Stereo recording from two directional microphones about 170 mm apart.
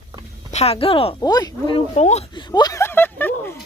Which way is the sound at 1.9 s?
40° left (ahead or behind).